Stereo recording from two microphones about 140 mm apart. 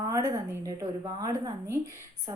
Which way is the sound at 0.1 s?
25° right (ahead or behind).